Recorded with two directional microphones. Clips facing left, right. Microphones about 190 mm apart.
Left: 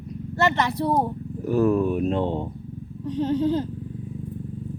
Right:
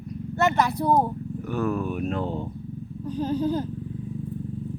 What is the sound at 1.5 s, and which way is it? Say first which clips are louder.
Speech: left 7 dB; 30° left (ahead or behind).